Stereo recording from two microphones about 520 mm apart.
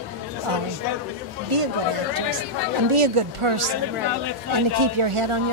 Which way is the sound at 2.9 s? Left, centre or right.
Right.